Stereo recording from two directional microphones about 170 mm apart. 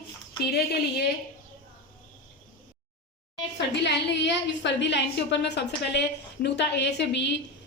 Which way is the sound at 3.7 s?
90° left.